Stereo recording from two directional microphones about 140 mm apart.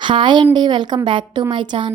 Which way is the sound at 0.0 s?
35° right (ahead or behind).